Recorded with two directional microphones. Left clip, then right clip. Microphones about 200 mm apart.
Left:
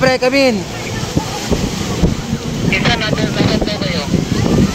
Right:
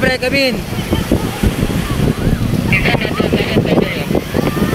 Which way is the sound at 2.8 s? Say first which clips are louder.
Even; 30° left (ahead or behind).